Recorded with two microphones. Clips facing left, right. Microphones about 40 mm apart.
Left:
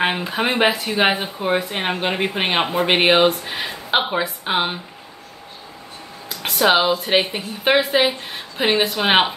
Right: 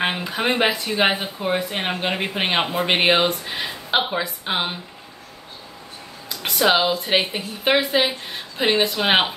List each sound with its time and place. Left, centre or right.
0.0 s speech: centre
6.4 s speech: centre
7.1 s speech: centre